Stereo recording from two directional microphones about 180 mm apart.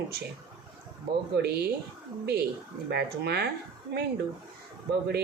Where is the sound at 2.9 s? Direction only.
65° right (ahead or behind).